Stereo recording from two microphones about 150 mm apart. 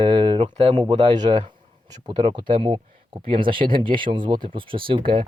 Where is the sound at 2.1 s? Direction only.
35° right (ahead or behind).